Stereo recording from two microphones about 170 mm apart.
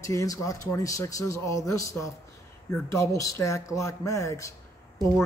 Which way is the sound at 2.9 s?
20° left (ahead or behind).